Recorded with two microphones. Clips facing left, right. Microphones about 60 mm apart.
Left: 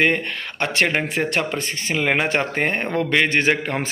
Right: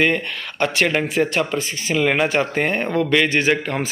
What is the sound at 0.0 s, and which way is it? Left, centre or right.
Speech, left.